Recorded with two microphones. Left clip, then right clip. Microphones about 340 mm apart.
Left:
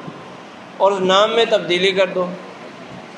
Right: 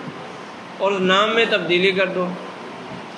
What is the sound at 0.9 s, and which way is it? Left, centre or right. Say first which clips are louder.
A man's voice: left 2 dB; centre.